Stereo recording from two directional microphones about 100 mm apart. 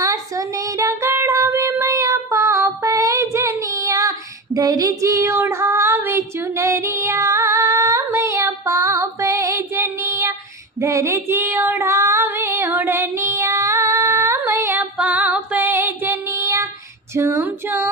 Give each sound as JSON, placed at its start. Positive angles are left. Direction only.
{"t": 0.0, "sound": "child singing", "side_deg": -35}
{"t": 10.8, "sound": "female singing", "side_deg": -30}
{"t": 14.9, "sound": "music", "side_deg": -15}
{"t": 17.2, "sound": "female singing", "side_deg": -25}